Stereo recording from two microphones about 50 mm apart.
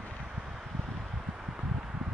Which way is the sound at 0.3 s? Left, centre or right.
Centre.